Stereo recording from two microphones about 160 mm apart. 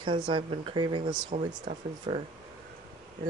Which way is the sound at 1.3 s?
40° right (ahead or behind).